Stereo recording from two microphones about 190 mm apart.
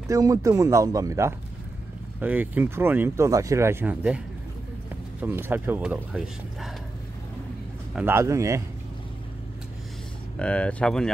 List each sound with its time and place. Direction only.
0.1 s speech: 15° right (ahead or behind)
5.2 s speech: 10° right (ahead or behind)
7.9 s speech: 10° right (ahead or behind)
10.4 s speech: 5° left (ahead or behind)